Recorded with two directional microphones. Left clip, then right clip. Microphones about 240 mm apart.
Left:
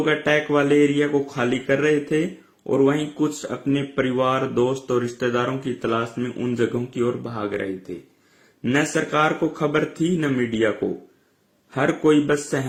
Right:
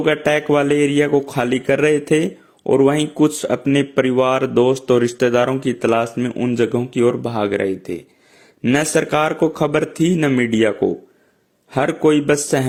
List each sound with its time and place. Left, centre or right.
0.0 s speech: right